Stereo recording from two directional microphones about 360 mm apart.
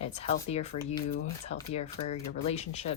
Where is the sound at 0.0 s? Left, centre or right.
Centre.